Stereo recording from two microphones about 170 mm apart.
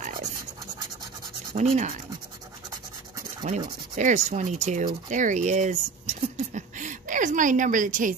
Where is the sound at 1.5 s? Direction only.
40° right (ahead or behind).